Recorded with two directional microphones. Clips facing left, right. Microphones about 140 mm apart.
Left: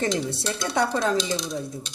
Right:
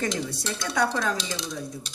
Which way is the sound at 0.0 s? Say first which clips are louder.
Left 3 dB; 30° left (ahead or behind).